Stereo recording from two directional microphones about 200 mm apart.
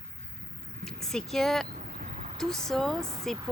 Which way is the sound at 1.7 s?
40° right (ahead or behind).